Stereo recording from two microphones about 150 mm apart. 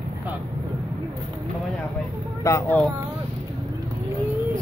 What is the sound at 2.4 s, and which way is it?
Speech, 20° left (ahead or behind).